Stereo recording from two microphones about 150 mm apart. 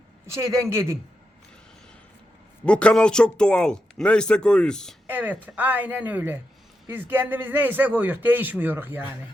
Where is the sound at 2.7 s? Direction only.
5° left (ahead or behind).